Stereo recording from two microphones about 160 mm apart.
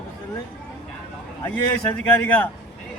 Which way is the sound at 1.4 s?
15° left (ahead or behind).